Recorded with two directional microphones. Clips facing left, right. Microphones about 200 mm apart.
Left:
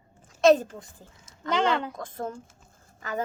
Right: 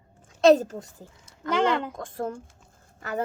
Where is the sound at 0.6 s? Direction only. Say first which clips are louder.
Right 4 dB; 40° right (ahead or behind).